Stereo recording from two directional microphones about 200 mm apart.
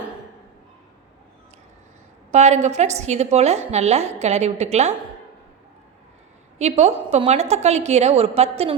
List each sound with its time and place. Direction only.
2.3 s a woman's voice: 35° right (ahead or behind)
6.6 s a woman's voice: 35° right (ahead or behind)